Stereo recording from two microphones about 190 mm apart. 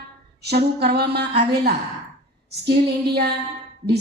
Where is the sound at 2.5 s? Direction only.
60° right (ahead or behind).